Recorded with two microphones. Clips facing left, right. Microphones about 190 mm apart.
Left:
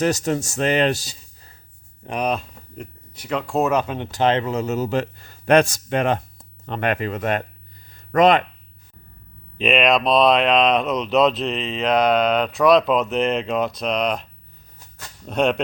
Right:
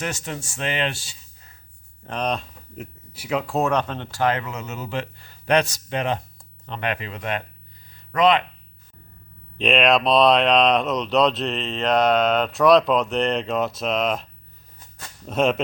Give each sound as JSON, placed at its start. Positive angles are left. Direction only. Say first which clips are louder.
{"t": 0.0, "sound": "speech", "louder": "left 9 dB", "side_deg": 40}
{"t": 2.0, "sound": "speech", "louder": "left 3 dB", "side_deg": 10}
{"t": 9.6, "sound": "speech", "louder": "left 1 dB", "side_deg": 0}
{"t": 15.3, "sound": "speech", "louder": "left 1 dB", "side_deg": 0}